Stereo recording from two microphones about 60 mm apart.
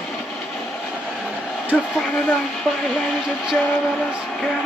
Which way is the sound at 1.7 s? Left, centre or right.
Left.